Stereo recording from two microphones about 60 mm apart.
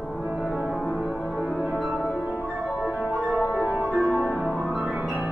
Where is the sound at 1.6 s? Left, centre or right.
Centre.